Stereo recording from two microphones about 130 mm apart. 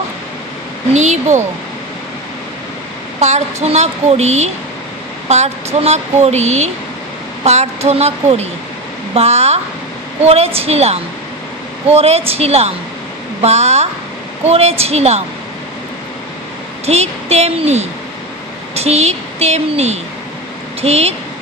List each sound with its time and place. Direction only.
0.9 s speech: 60° right (ahead or behind)
3.2 s a woman's voice: 60° right (ahead or behind)
16.8 s a woman's voice: 55° right (ahead or behind)